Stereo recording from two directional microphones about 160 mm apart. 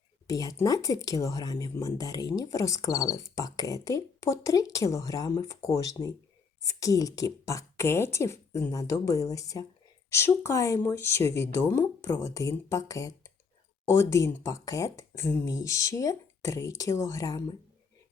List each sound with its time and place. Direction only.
0.3 s speech: 20° left (ahead or behind)